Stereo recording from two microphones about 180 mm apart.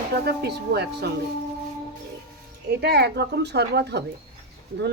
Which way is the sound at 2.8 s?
65° right (ahead or behind).